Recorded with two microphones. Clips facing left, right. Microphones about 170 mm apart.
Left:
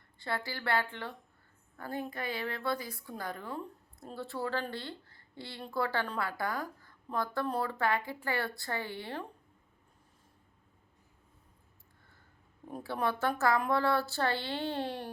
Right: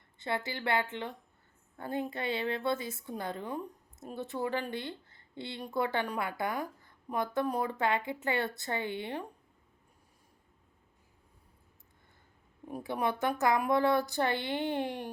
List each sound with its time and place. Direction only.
0.2 s a woman's voice: 20° right (ahead or behind)
12.6 s a woman's voice: 15° right (ahead or behind)